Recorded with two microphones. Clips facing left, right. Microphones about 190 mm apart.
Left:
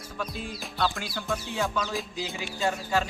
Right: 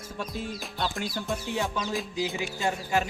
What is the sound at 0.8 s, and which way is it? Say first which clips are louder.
Speech: left 2 dB; 20° right (ahead or behind).